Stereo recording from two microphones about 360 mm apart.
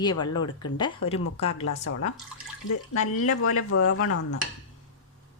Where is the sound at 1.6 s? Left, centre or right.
Left.